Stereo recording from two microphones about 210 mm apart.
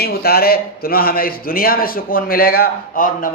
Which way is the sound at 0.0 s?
45° left (ahead or behind).